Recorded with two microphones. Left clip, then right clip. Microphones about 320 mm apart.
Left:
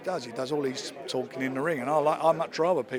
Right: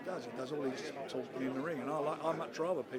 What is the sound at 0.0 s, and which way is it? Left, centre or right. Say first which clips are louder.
A man's voice: left 10 dB; left.